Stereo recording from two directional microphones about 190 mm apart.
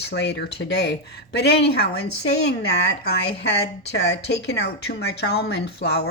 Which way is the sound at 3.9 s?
60° left (ahead or behind).